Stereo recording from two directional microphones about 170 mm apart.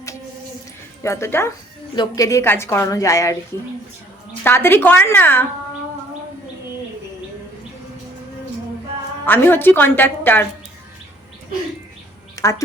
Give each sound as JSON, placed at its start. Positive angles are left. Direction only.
{"t": 1.0, "sound": "a woman's voice", "side_deg": 15}
{"t": 4.4, "sound": "a woman's voice", "side_deg": 15}
{"t": 9.2, "sound": "a woman's voice", "side_deg": 10}
{"t": 12.4, "sound": "a woman's voice", "side_deg": 20}